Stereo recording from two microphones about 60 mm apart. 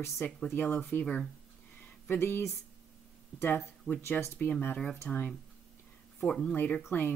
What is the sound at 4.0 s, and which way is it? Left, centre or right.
Speech, left.